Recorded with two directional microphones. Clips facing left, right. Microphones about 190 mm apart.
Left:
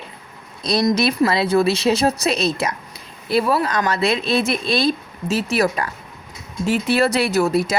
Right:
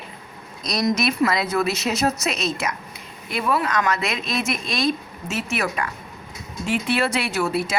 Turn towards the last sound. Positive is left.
turn(degrees=40)  # may be behind; listen again after turning